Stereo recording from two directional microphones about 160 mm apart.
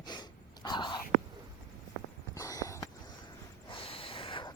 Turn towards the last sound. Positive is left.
turn(degrees=30)  # may be behind; listen again after turning